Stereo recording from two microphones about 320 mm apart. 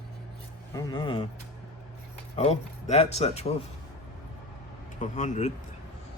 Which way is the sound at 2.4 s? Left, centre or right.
Centre.